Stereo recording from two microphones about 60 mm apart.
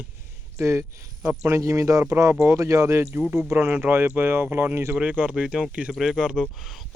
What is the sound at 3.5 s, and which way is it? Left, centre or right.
Speech, right.